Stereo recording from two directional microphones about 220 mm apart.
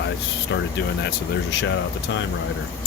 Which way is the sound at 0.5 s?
55° left (ahead or behind).